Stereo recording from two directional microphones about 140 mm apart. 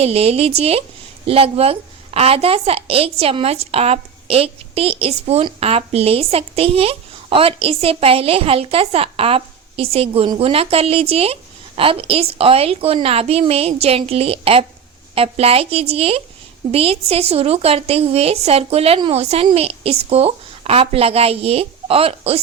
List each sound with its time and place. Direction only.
0.0 s a woman's voice: 45° right (ahead or behind)
19.2 s a woman's voice: 50° right (ahead or behind)